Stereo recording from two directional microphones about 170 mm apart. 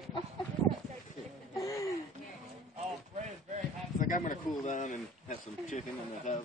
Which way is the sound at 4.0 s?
50° left (ahead or behind).